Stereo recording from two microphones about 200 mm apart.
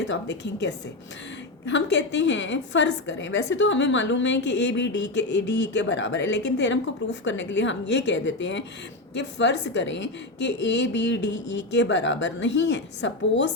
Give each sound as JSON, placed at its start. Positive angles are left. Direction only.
{"t": 0.1, "sound": "a woman's voice", "side_deg": 60}